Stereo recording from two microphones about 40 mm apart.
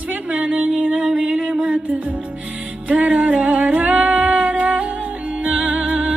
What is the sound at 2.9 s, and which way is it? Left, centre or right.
Music, right.